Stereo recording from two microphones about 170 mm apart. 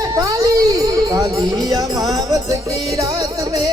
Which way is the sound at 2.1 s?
20° right (ahead or behind).